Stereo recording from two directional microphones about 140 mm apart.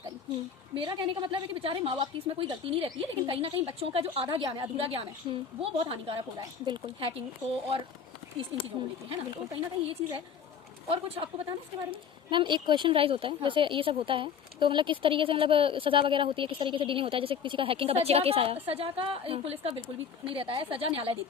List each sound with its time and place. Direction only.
0.7 s a woman's voice: 35° right (ahead or behind)
9.0 s a woman's voice: 40° right (ahead or behind)